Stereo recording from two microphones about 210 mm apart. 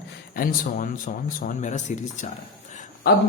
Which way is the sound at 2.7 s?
35° left (ahead or behind).